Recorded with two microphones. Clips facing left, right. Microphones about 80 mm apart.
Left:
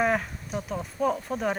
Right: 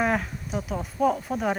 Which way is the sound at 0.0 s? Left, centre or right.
Centre.